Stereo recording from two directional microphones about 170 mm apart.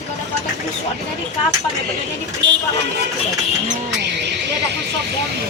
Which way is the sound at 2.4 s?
90° right.